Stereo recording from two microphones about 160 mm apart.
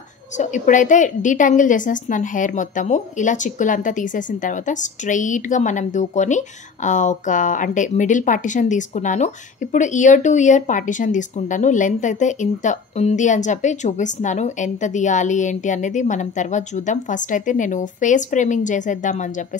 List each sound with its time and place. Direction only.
0.4 s a woman's voice: 50° left (ahead or behind)